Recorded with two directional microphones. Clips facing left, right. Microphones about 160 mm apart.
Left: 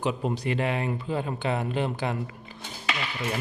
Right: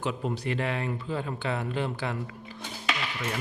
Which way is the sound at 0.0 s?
20° left (ahead or behind).